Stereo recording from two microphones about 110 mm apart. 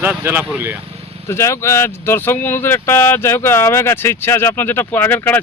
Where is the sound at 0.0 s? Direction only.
20° right (ahead or behind).